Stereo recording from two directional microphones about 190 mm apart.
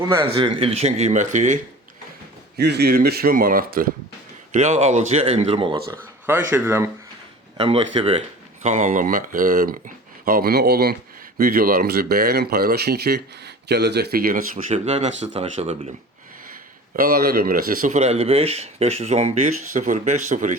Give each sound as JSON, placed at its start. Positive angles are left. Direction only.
{"t": 0.3, "sound": "speech", "side_deg": -25}
{"t": 2.6, "sound": "speech", "side_deg": -60}
{"t": 4.5, "sound": "speech", "side_deg": -35}
{"t": 6.2, "sound": "speech", "side_deg": -10}
{"t": 7.6, "sound": "speech", "side_deg": -30}
{"t": 16.9, "sound": "speech", "side_deg": -50}